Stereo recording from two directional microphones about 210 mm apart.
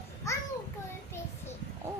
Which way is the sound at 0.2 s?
15° left (ahead or behind).